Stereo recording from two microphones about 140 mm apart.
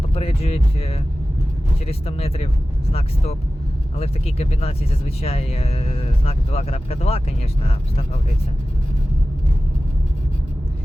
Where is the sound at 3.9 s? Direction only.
45° left (ahead or behind).